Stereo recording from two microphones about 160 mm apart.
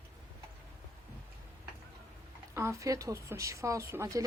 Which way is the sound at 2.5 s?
20° right (ahead or behind).